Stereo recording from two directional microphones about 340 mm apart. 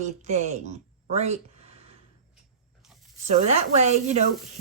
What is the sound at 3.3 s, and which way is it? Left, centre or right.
Speech, centre.